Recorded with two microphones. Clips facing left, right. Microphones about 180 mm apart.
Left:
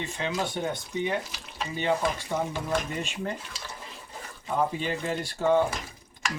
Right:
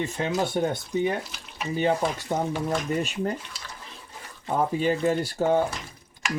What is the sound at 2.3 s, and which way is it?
Speech, 45° right (ahead or behind).